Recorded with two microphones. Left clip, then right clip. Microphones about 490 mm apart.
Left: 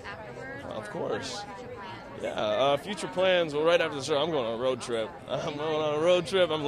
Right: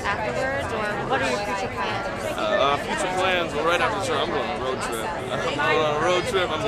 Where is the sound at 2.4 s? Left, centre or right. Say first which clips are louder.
Right 4 dB; left.